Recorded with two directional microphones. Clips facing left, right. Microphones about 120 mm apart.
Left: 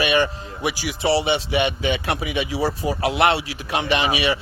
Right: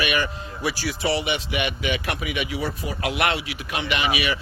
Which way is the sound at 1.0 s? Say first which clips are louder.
Left 5 dB; 30° left (ahead or behind).